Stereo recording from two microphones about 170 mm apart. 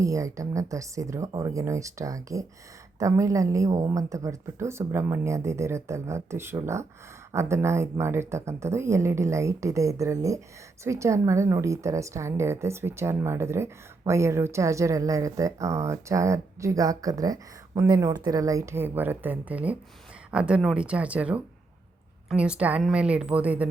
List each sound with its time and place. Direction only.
0.0 s a woman's voice: 20° right (ahead or behind)